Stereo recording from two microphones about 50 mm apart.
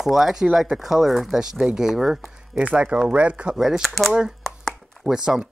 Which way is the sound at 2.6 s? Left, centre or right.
Right.